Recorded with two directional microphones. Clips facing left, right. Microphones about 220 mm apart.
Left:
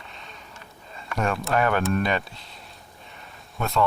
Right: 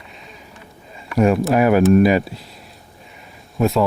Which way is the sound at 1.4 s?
Centre (ahead or behind).